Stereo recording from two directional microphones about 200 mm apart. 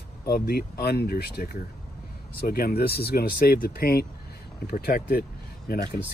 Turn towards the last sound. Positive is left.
turn(degrees=45)  # may be behind; listen again after turning